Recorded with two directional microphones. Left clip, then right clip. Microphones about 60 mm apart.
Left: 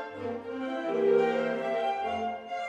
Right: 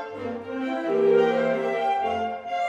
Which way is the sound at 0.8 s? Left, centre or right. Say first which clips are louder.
Right 5 dB; centre.